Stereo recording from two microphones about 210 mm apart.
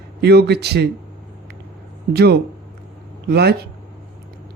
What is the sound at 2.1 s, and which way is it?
Speech, 50° right (ahead or behind).